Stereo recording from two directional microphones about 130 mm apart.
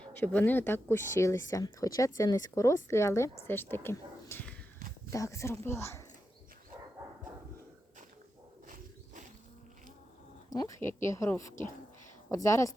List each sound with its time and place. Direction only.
0.0 s speech: 15° left (ahead or behind)
8.6 s wild animals: 90° right
10.5 s speech: 25° left (ahead or behind)